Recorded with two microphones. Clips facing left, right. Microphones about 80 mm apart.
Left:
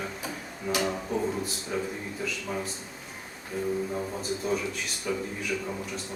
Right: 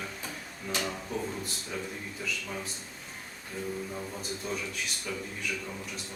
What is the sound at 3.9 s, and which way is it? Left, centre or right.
Speech, left.